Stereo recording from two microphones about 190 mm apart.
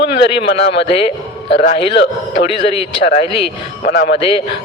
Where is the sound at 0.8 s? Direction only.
30° left (ahead or behind).